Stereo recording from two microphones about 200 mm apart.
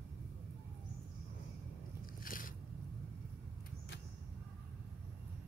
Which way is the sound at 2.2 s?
45° left (ahead or behind).